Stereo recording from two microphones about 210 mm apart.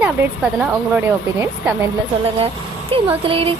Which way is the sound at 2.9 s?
25° right (ahead or behind).